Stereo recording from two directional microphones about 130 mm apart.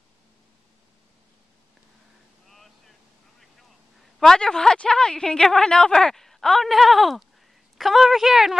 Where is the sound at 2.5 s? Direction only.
Centre (ahead or behind).